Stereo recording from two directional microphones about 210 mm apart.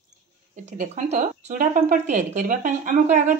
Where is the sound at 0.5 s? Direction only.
35° right (ahead or behind).